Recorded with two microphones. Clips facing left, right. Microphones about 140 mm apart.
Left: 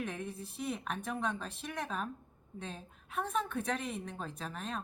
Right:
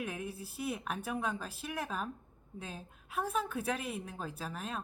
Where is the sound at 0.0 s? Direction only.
5° right (ahead or behind).